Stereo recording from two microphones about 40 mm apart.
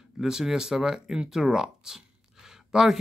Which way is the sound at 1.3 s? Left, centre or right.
Centre.